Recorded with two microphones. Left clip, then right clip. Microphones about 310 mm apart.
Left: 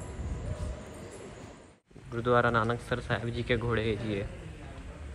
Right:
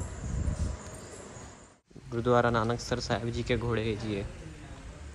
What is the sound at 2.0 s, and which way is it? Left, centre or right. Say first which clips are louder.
Speech: even; centre.